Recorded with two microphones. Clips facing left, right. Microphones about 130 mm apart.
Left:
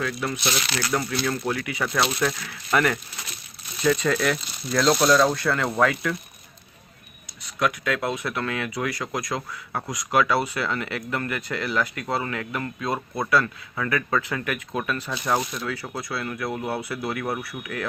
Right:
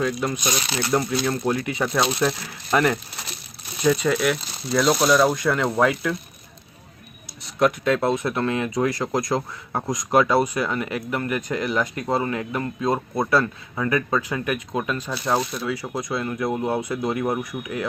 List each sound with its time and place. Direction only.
0.0 s speech: 20° right (ahead or behind)
7.6 s speech: 30° right (ahead or behind)